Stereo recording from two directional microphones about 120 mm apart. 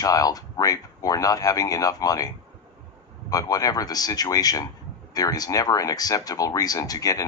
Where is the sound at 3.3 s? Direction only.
30° left (ahead or behind).